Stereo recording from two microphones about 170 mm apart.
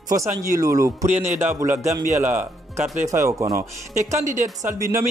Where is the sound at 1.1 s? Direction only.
45° right (ahead or behind).